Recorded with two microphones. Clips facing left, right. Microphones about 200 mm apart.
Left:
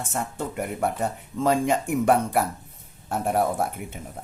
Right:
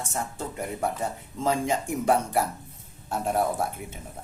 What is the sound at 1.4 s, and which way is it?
Speech, 60° left (ahead or behind).